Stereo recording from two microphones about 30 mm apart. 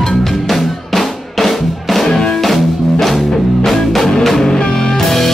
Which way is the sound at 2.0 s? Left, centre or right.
Centre.